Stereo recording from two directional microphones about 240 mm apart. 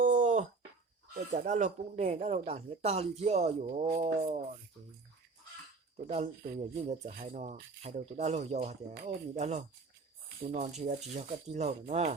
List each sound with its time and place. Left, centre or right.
0.0 s a sound: right
1.3 s speech: right
6.0 s speech: right
6.4 s speech: right
6.8 s speech: right